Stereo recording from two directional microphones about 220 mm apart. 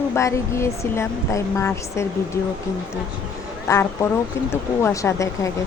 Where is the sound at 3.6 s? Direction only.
10° left (ahead or behind).